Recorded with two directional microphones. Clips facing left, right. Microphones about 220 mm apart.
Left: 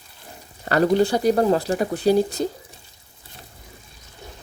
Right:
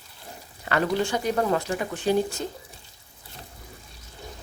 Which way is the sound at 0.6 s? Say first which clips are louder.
Left 7 dB; 40° left (ahead or behind).